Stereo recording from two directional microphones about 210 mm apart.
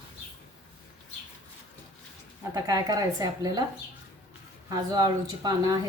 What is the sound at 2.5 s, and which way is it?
Speech, 15° right (ahead or behind).